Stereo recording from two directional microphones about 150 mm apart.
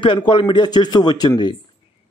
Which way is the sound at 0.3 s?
30° left (ahead or behind).